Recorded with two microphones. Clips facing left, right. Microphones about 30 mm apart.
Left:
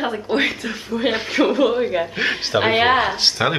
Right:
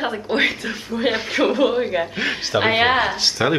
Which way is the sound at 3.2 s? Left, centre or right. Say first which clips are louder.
Even; centre.